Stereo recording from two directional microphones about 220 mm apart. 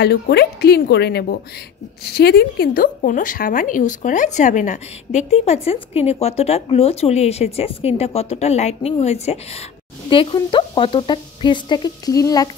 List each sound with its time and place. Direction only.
0.0 s speech: 45° left (ahead or behind); by 12.4 s 15° left (ahead or behind)